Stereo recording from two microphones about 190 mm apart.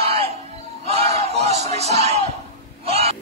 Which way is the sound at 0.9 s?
30° right (ahead or behind).